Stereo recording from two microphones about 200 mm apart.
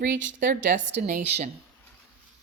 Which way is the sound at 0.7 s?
40° right (ahead or behind).